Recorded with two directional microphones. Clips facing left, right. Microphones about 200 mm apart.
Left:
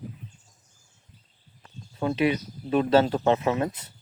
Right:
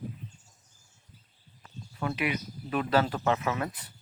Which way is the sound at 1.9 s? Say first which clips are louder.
Left 7 dB; 30° left (ahead or behind).